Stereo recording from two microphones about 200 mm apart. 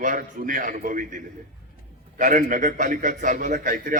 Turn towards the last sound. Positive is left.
turn(degrees=-40)  # may be behind; listen again after turning